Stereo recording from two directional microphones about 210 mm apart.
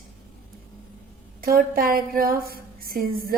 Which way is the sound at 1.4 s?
45° right (ahead or behind).